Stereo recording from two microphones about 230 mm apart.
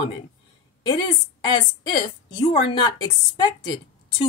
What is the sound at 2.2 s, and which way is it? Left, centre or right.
Speech, centre.